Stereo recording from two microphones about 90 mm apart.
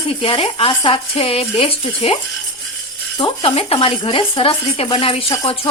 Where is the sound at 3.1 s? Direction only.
75° left (ahead or behind); by 4.8 s 90° left.